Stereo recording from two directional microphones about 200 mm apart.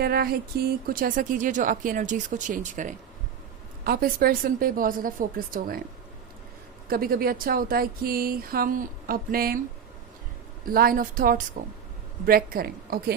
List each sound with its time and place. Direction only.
0.0 s speech: 50° right (ahead or behind)
6.8 s speech: 45° right (ahead or behind)
10.7 s speech: 45° right (ahead or behind)